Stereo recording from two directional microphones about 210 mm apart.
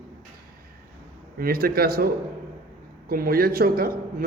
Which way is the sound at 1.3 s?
45° right (ahead or behind).